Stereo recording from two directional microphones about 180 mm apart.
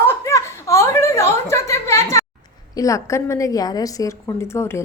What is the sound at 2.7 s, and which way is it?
A woman's voice, 20° left (ahead or behind).